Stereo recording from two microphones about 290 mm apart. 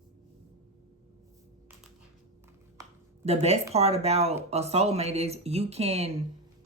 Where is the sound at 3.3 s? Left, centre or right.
Right.